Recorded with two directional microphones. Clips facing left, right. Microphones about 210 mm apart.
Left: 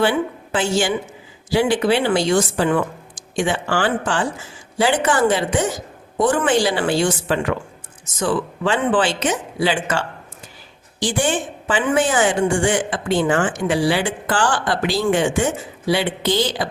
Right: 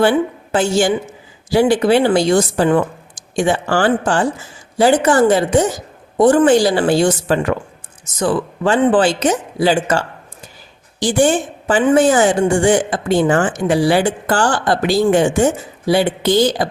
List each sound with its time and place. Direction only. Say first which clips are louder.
0.0 s a woman's voice: right 5 dB; 45° right (ahead or behind)